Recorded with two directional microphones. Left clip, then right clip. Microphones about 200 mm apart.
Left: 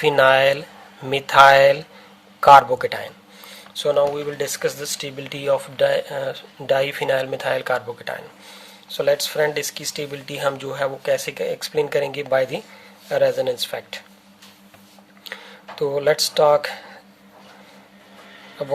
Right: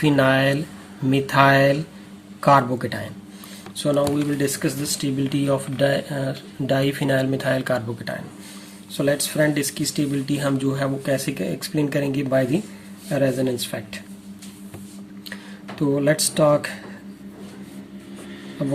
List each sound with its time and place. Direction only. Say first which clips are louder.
0.0 s speech: left 4 dB; 35° left (ahead or behind)
16.0 s speech: left 3 dB; 40° left (ahead or behind)